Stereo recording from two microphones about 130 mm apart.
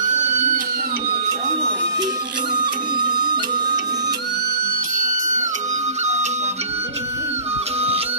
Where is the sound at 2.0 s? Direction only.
35° right (ahead or behind).